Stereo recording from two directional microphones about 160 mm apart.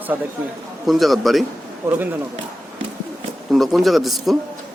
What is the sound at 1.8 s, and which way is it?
Speech, 15° right (ahead or behind).